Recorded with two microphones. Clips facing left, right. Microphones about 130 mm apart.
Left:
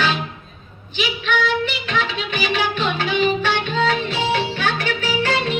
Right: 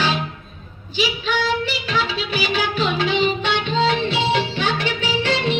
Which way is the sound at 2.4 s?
30° right (ahead or behind).